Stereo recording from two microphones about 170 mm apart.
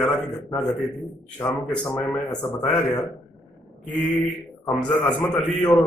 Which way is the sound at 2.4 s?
20° left (ahead or behind).